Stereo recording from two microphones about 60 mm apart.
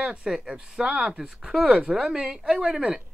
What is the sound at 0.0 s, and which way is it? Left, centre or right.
A woman's voice, centre.